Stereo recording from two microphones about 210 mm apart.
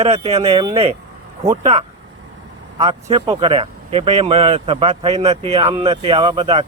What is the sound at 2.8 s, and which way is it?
Speech, 25° right (ahead or behind).